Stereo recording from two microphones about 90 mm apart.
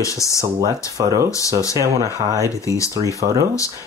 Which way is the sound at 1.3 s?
35° left (ahead or behind).